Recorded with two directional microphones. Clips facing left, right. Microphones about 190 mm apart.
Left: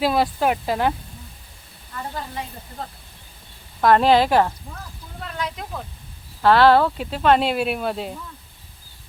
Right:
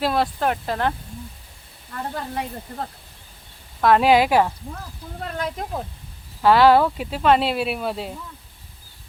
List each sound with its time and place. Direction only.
0.0 s speech: centre (ahead or behind)
2.1 s speech: 55° right (ahead or behind)
3.8 s speech: centre (ahead or behind)
5.2 s speech: 45° right (ahead or behind)
6.4 s speech: 10° right (ahead or behind)